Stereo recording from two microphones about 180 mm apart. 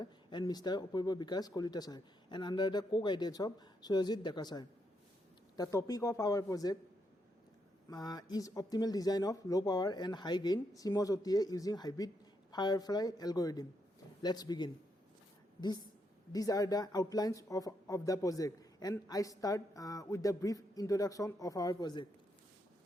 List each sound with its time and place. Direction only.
0.0 s speech: 25° left (ahead or behind)
7.9 s speech: 20° left (ahead or behind)
16.3 s speech: 20° left (ahead or behind)